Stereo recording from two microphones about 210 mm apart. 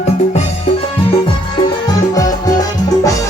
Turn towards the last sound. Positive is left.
turn(degrees=15)  # may be behind; listen again after turning